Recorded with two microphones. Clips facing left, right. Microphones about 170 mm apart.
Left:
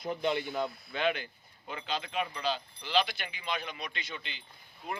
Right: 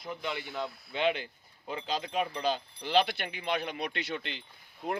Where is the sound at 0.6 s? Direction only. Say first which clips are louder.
Left 3 dB; centre (ahead or behind).